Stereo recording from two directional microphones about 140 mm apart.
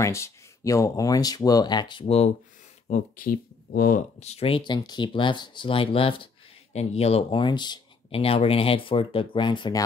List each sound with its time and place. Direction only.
0.0 s speech: 20° left (ahead or behind); by 2.3 s 50° left (ahead or behind)
2.9 s speech: 85° left
4.2 s speech: 50° left (ahead or behind)
6.7 s speech: 50° left (ahead or behind); by 9.8 s 30° left (ahead or behind)